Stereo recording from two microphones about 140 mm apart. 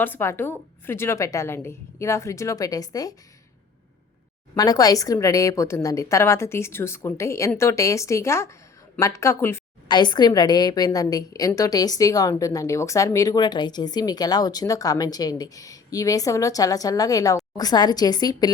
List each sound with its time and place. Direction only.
0.0 s a woman's voice: 15° left (ahead or behind)
4.5 s a woman's voice: 25° left (ahead or behind)
9.9 s a woman's voice: 30° left (ahead or behind)